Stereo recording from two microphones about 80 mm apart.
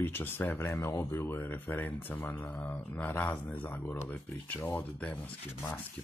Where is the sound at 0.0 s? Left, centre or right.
Left.